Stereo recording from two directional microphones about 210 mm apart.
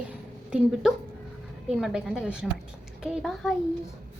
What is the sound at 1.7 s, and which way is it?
A woman's voice, 5° right (ahead or behind).